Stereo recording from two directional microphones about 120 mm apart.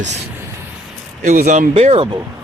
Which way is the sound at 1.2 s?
85° right.